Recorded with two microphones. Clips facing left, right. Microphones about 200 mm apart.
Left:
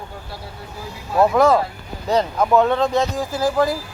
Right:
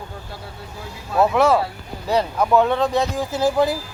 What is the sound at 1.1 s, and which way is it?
Speech, centre (ahead or behind).